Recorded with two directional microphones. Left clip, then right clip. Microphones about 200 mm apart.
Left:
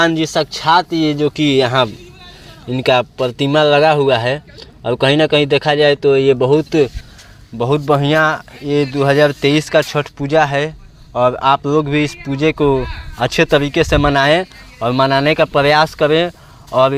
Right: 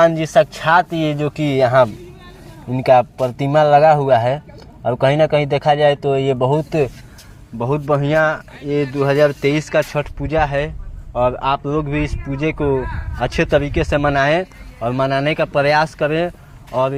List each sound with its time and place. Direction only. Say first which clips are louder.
0.1 s speech: right 2 dB; 35° left (ahead or behind)
2.6 s speech: right 1 dB; 40° left (ahead or behind)
3.5 s a man's voice: right 1 dB; 60° left (ahead or behind); by 16.3 s 35° left (ahead or behind)